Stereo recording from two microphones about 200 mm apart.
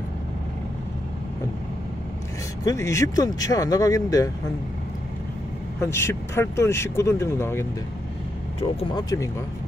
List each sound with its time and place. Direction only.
2.6 s speech: 15° left (ahead or behind)
5.8 s speech: 15° left (ahead or behind)
8.5 s speech: 30° left (ahead or behind)